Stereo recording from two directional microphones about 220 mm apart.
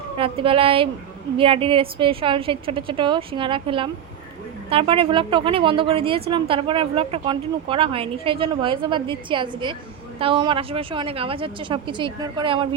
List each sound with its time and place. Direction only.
0.2 s speech: 25° right (ahead or behind)